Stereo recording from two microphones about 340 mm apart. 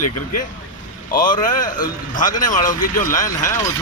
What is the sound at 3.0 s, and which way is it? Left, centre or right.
Speech, centre.